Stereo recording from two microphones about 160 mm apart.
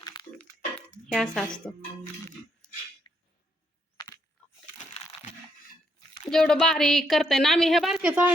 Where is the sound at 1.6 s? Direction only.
5° left (ahead or behind).